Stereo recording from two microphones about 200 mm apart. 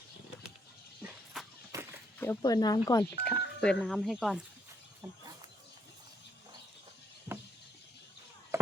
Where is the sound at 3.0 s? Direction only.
5° left (ahead or behind).